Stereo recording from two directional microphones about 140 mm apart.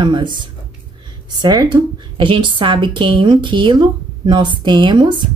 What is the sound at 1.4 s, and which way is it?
A woman's voice, 30° right (ahead or behind).